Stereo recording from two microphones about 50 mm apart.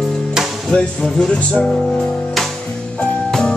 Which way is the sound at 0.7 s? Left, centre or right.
Left.